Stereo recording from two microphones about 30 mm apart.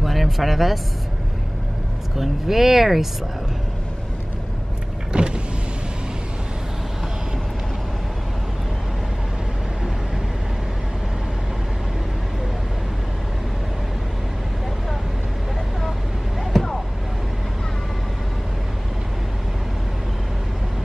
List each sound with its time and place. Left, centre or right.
0.0 s speech: centre
2.1 s speech: centre
5.1 s power windows: right
16.5 s a sound: centre